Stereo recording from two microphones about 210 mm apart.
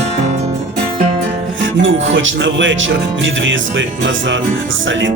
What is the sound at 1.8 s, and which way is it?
Speech, 65° right (ahead or behind).